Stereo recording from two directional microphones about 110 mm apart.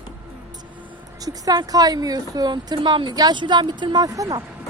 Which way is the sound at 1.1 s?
35° right (ahead or behind).